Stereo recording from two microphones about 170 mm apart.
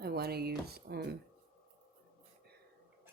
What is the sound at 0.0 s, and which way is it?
Speech, 65° right (ahead or behind).